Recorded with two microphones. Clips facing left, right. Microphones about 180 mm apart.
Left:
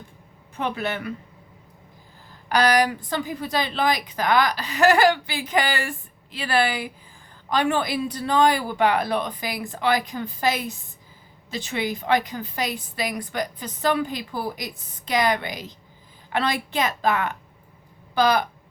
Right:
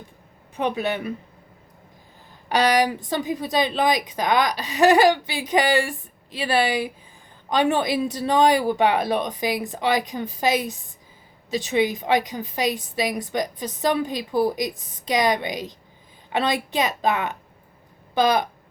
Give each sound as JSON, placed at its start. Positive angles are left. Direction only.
{"t": 0.5, "sound": "speech", "side_deg": -15}
{"t": 2.5, "sound": "a woman's voice", "side_deg": -20}
{"t": 7.5, "sound": "a woman's voice", "side_deg": -20}